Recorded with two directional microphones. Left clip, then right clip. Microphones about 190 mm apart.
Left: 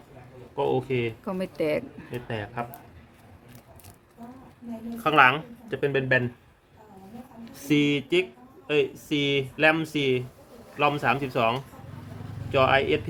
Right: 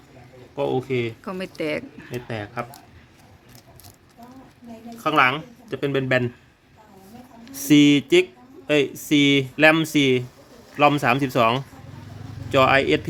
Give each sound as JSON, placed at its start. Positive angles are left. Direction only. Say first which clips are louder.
{"t": 0.5, "sound": "speech", "louder": "right 2 dB", "side_deg": -30}
{"t": 1.2, "sound": "speech", "louder": "even", "side_deg": 0}
{"t": 2.2, "sound": "speech", "louder": "right 2 dB", "side_deg": -35}
{"t": 5.0, "sound": "a woman's voice", "louder": "even", "side_deg": -15}
{"t": 5.7, "sound": "speech", "louder": "right 2 dB", "side_deg": -35}
{"t": 7.5, "sound": "speech", "louder": "right 8 dB", "side_deg": -55}